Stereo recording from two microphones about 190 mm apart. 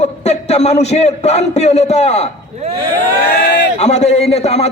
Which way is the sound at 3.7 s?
35° left (ahead or behind).